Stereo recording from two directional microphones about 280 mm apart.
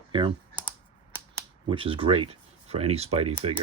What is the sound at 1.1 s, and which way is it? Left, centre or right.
Camera, centre.